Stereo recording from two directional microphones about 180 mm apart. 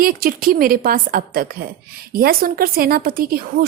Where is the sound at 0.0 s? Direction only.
50° right (ahead or behind).